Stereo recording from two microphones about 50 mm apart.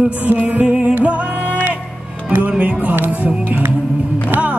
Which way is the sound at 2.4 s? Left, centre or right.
Right.